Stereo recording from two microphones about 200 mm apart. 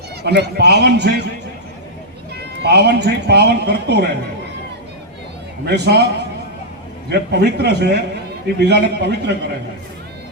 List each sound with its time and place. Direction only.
0.2 s speech: 55° right (ahead or behind)
2.4 s speech: 55° right (ahead or behind)
5.6 s speech: 55° right (ahead or behind)
7.1 s speech: 55° right (ahead or behind)